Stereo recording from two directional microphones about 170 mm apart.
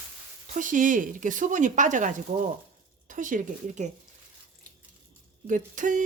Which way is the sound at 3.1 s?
50° right (ahead or behind).